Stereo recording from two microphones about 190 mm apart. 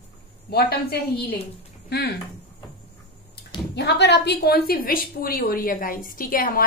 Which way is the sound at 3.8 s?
60° left (ahead or behind).